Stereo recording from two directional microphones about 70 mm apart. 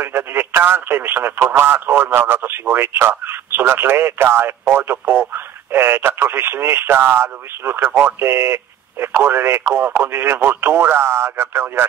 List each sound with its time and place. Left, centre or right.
0.0 s speech: right